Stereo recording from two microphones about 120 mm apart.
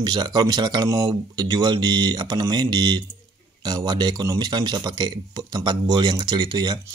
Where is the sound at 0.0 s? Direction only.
35° right (ahead or behind).